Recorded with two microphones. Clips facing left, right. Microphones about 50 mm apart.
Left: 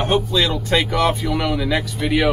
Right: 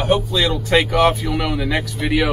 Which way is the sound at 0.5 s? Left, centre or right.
Right.